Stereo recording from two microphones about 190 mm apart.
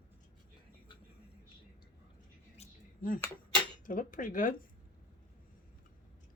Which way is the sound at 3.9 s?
45° left (ahead or behind).